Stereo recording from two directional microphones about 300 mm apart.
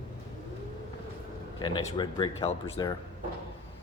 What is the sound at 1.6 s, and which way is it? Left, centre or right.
A man's voice, centre.